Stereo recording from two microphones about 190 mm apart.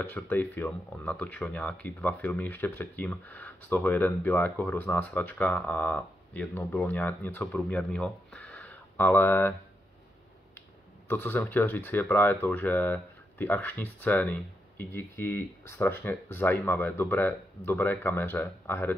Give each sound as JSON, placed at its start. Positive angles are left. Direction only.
{"t": 0.1, "sound": "speech", "side_deg": 10}
{"t": 11.1, "sound": "speech", "side_deg": 10}